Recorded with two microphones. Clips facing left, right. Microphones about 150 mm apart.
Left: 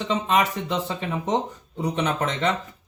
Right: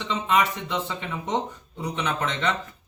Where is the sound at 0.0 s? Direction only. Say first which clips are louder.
Left 2 dB; 40° left (ahead or behind).